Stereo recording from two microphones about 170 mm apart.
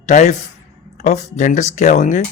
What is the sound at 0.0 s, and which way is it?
Speech, 45° left (ahead or behind).